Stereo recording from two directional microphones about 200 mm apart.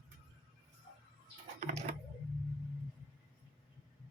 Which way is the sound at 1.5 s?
35° right (ahead or behind).